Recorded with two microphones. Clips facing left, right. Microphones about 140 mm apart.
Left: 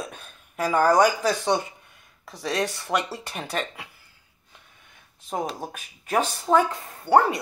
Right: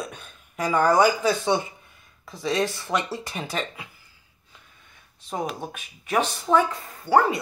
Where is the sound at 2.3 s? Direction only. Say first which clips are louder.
Right 2 dB; 75° left (ahead or behind).